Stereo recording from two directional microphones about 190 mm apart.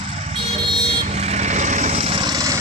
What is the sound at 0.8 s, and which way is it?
Vehicle, 30° right (ahead or behind).